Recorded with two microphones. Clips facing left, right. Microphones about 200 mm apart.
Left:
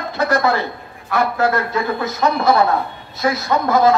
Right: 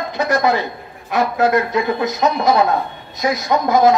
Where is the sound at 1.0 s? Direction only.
20° right (ahead or behind).